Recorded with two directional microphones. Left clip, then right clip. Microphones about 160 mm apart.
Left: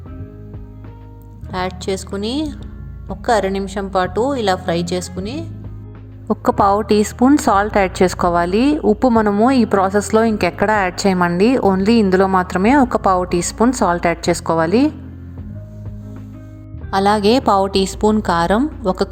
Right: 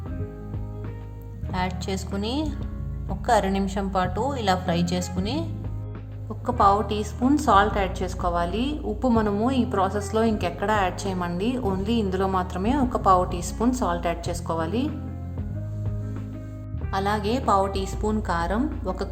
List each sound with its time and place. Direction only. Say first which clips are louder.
1.5 s a woman's voice: left 7 dB; 30° left (ahead or behind)
6.2 s a woman's voice: left 6 dB; 50° left (ahead or behind)
16.9 s a woman's voice: left 11 dB; 50° left (ahead or behind)